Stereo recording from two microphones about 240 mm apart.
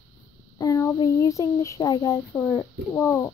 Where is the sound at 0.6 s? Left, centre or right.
Centre.